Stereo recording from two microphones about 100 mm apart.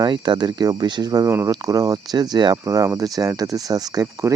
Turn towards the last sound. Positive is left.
turn(degrees=-30)  # may be behind; listen again after turning